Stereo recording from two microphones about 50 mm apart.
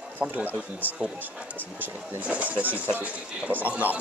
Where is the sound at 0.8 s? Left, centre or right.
Right.